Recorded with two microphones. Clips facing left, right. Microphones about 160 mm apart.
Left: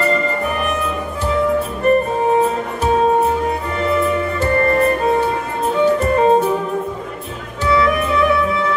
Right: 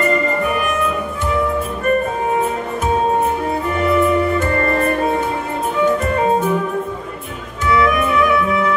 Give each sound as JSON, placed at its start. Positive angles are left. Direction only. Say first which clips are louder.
{"t": 1.9, "sound": "music", "louder": "left 3 dB", "side_deg": 30}
{"t": 7.6, "sound": "music", "louder": "even", "side_deg": 30}